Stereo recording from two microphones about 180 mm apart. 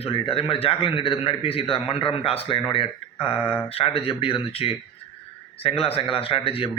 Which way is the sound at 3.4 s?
10° left (ahead or behind).